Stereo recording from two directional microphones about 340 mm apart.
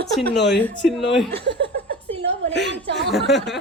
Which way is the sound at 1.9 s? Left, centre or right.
Centre.